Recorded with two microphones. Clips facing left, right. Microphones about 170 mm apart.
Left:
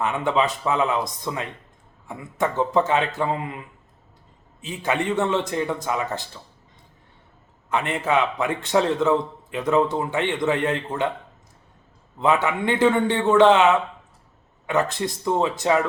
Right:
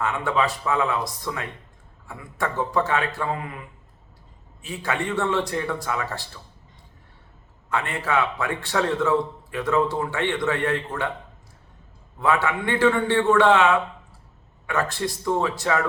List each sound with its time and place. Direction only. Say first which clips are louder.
0.0 s a man's voice: left 2 dB; 20° left (ahead or behind)
4.6 s a man's voice: left 3 dB; 20° left (ahead or behind)
7.7 s a man's voice: left 3 dB; 20° left (ahead or behind)
12.2 s a man's voice: left 2 dB; 20° left (ahead or behind)